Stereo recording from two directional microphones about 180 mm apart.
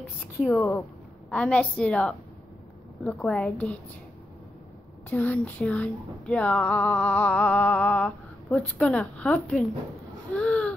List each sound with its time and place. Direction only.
0.5 s a woman's voice: 15° left (ahead or behind)
5.1 s speech: 10° left (ahead or behind)
10.3 s a sound: 5° left (ahead or behind)